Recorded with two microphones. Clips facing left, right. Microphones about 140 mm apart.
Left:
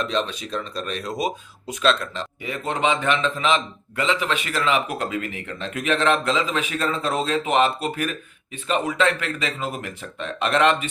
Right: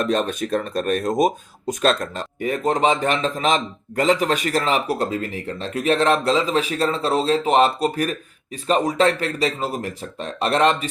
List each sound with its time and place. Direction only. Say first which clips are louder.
0.0 s speech: right 4 dB; 50° right (ahead or behind)